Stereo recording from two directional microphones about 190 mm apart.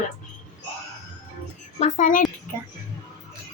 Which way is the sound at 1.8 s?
45° left (ahead or behind).